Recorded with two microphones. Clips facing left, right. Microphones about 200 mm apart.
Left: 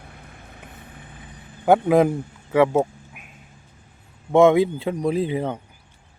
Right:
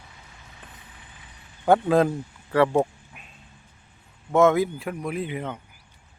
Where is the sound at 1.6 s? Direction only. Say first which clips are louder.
Left 3 dB; 15° left (ahead or behind).